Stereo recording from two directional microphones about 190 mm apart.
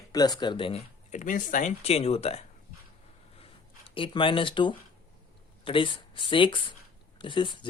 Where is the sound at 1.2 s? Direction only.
45° left (ahead or behind).